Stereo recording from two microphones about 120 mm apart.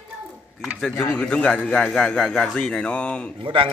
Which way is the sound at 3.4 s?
45° right (ahead or behind).